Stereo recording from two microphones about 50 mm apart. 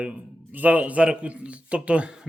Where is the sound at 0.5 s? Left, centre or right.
Right.